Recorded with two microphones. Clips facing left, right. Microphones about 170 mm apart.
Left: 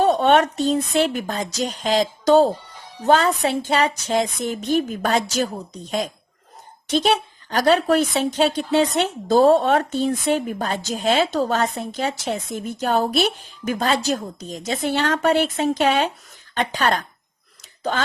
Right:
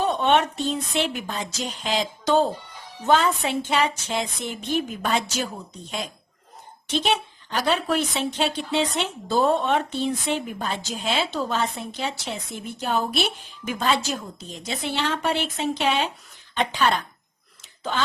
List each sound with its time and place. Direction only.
0.0 s a woman's voice: 45° left (ahead or behind)